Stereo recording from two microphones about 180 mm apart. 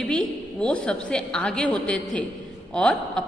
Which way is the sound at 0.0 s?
5° left (ahead or behind).